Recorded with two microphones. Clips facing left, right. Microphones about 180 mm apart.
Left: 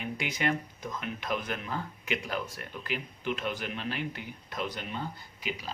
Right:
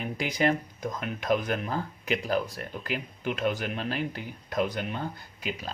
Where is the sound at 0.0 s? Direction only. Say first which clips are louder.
Right 5 dB; 35° right (ahead or behind).